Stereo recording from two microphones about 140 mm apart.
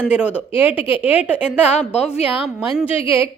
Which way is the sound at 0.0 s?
10° right (ahead or behind).